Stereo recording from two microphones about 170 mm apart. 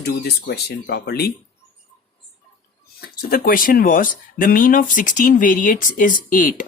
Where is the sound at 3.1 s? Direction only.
60° left (ahead or behind).